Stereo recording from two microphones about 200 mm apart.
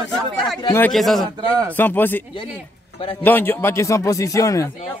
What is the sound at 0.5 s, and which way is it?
Speech, 20° left (ahead or behind).